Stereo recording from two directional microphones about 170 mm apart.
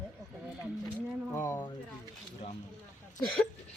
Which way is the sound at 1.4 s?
10° left (ahead or behind).